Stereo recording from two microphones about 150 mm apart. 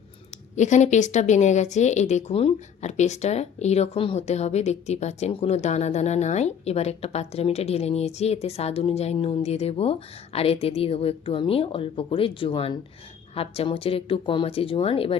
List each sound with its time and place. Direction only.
0.5 s speech: 50° left (ahead or behind)